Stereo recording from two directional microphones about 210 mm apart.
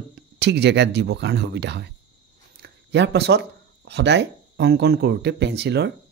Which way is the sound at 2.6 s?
55° right (ahead or behind).